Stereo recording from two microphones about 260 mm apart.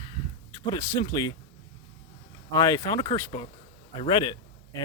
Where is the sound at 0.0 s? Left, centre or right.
Centre.